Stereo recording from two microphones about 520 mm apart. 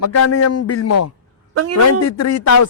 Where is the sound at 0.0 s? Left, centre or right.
Left.